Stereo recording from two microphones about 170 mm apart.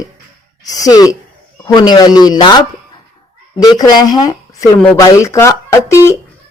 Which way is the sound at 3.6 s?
25° left (ahead or behind).